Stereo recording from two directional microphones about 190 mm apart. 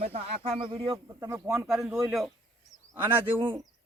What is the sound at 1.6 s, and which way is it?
Speech, centre (ahead or behind).